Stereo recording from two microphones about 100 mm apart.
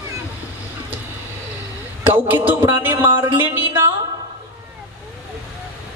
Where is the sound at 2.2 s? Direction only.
20° right (ahead or behind).